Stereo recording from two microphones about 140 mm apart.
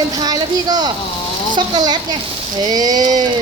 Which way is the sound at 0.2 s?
30° right (ahead or behind).